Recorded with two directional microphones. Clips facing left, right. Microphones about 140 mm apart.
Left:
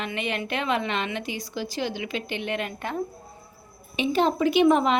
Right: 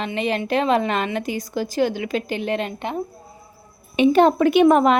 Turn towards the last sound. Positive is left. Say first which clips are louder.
# right 5 dB
turn(degrees=-50)  # may be behind; listen again after turning